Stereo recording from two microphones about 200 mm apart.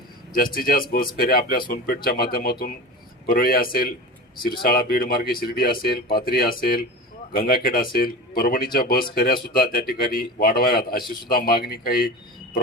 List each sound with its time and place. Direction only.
0.3 s speech: 45° left (ahead or behind)